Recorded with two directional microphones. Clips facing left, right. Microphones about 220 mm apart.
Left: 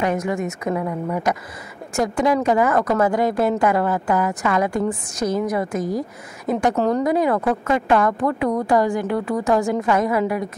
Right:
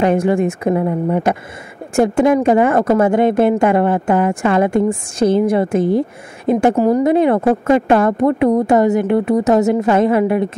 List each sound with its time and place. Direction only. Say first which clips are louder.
0.0 s speech: right 8 dB; 30° right (ahead or behind)